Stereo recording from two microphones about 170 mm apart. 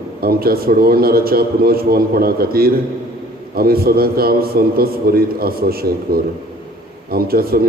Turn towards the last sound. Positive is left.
turn(degrees=-60)  # may be behind; listen again after turning